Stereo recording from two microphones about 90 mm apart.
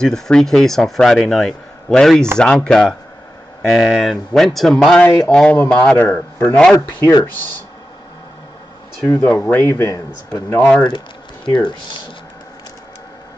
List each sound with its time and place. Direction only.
0.0 s speech: 5° left (ahead or behind); by 6.2 s 25° left (ahead or behind)
6.4 s speech: 10° left (ahead or behind)
9.0 s speech: 20° left (ahead or behind)
9.3 s speech: 10° left (ahead or behind)
9.6 s speech: 30° left (ahead or behind)
11.4 s speech: 65° left (ahead or behind)